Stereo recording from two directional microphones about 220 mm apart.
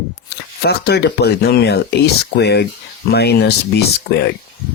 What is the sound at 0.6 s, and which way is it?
Speech, 45° left (ahead or behind).